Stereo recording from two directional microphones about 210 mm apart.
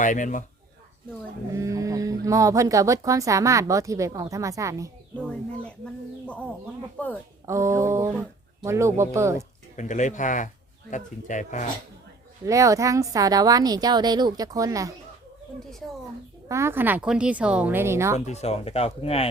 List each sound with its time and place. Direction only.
0.0 s speech: 35° left (ahead or behind)
1.5 s music: 15° right (ahead or behind)
2.2 s speech: 15° right (ahead or behind)
5.6 s a woman's voice: 5° left (ahead or behind)
7.4 s speech: 15° right (ahead or behind)
9.7 s speech: 35° left (ahead or behind)
12.5 s speech: 15° right (ahead or behind)
16.5 s speech: 15° right (ahead or behind)
18.3 s speech: 30° left (ahead or behind)